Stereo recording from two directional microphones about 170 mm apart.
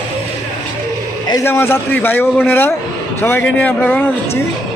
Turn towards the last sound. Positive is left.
turn(degrees=10)  # may be behind; listen again after turning